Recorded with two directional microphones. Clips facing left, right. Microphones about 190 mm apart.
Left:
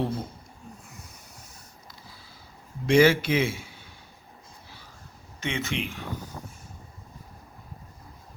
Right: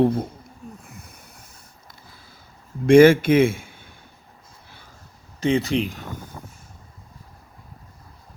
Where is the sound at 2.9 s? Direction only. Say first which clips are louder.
Right 8 dB; 50° right (ahead or behind).